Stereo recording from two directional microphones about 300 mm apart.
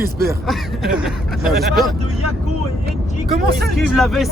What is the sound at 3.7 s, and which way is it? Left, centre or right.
Speech, centre.